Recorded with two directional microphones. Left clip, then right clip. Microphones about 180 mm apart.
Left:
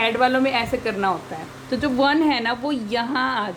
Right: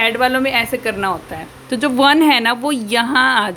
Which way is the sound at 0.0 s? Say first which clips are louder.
Right 4 dB; 10° right (ahead or behind).